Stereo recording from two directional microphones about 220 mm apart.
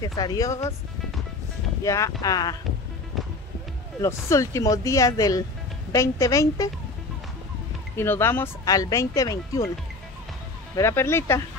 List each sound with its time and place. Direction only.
0.0 s speech: 15° left (ahead or behind)
1.8 s speech: 15° left (ahead or behind)
4.0 s speech: 15° left (ahead or behind)
7.9 s speech: 10° left (ahead or behind)
10.8 s speech: 10° left (ahead or behind)